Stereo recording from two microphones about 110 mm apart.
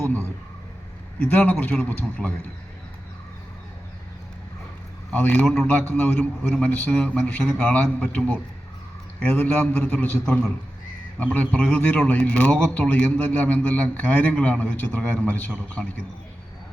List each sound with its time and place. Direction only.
1.2 s a man's voice: 15° left (ahead or behind)
5.1 s a man's voice: 15° left (ahead or behind)